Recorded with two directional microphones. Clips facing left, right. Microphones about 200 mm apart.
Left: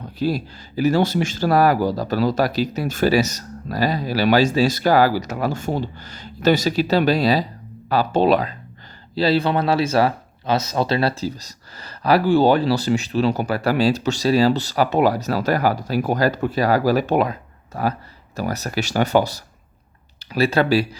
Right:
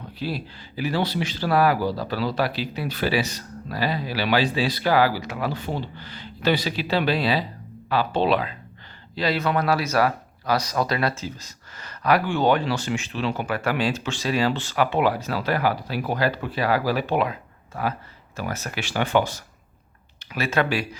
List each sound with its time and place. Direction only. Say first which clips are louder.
0.2 s speech: left 8 dB; 40° left (ahead or behind)
9.1 s speech: left 5 dB; 30° left (ahead or behind)